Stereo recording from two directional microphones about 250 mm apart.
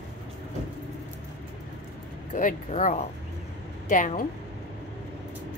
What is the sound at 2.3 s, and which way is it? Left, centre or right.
A woman's voice, left.